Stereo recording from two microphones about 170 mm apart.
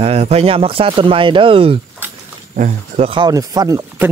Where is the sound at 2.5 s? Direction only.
45° right (ahead or behind); by 4.1 s 15° right (ahead or behind).